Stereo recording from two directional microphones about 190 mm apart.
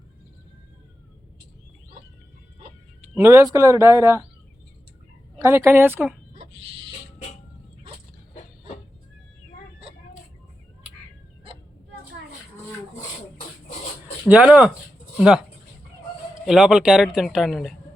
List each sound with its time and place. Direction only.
3.0 s speech: 15° right (ahead or behind)
5.4 s speech: 15° right (ahead or behind)
14.3 s speech: 5° right (ahead or behind)
16.5 s speech: 5° right (ahead or behind)